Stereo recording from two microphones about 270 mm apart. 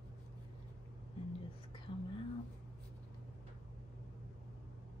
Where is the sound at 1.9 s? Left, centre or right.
Centre.